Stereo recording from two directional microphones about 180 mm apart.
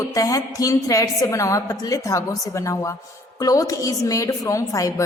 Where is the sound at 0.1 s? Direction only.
20° left (ahead or behind).